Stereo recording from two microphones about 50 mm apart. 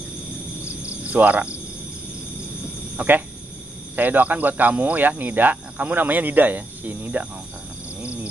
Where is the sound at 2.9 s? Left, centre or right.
Right.